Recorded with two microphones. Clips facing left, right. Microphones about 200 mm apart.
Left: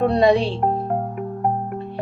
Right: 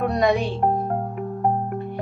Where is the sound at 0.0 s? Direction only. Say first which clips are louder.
Left 4 dB; 30° left (ahead or behind).